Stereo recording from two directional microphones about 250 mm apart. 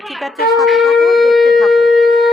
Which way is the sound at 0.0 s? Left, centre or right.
Centre.